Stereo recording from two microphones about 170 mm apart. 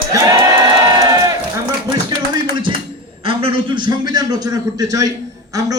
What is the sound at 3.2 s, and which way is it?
A man's voice, 30° right (ahead or behind).